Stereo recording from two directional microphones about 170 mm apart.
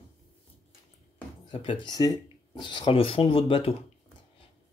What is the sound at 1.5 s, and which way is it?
Speech, 30° left (ahead or behind).